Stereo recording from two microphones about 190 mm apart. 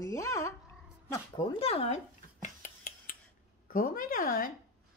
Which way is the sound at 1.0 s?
20° left (ahead or behind).